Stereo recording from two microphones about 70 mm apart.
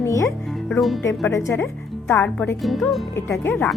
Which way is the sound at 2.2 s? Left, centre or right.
Left.